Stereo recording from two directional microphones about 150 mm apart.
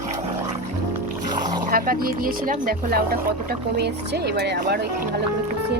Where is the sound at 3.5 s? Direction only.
90° right.